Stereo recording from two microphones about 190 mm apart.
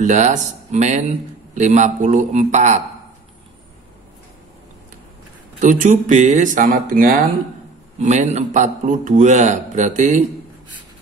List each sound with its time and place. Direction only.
0.0 s a man's voice: 40° right (ahead or behind)
5.6 s a man's voice: 40° right (ahead or behind)